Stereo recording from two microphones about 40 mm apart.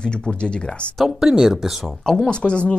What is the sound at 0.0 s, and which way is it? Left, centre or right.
Speech, left.